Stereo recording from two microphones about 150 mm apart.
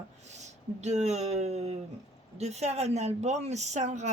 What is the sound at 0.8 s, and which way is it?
A woman's voice, 45° right (ahead or behind).